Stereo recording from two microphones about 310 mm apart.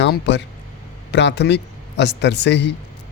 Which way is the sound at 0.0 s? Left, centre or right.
Left.